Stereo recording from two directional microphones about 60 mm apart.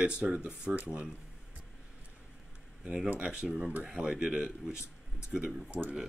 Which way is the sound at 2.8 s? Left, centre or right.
Right.